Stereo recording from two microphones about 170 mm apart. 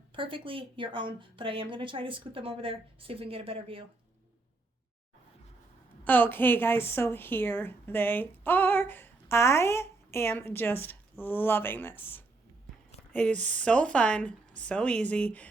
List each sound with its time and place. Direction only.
0.1 s a woman's voice: 30° right (ahead or behind)
6.1 s a woman's voice: 10° left (ahead or behind)